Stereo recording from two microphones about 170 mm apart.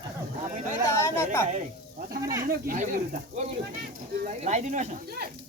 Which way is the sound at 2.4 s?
60° right (ahead or behind).